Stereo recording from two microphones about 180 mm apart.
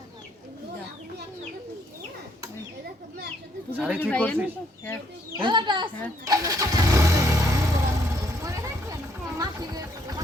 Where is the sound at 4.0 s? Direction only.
5° left (ahead or behind).